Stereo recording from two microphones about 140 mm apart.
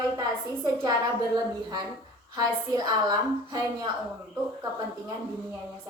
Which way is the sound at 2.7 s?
30° right (ahead or behind).